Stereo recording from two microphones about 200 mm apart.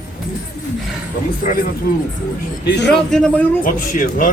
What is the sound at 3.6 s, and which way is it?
Speech, 40° left (ahead or behind).